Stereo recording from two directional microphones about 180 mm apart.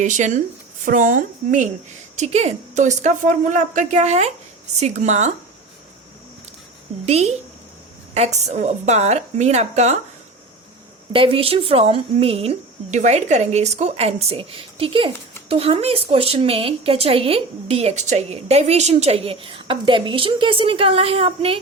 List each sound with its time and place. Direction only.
0.0 s a woman's voice: 40° right (ahead or behind)
7.0 s a woman's voice: 35° right (ahead or behind)
11.1 s a woman's voice: 30° right (ahead or behind)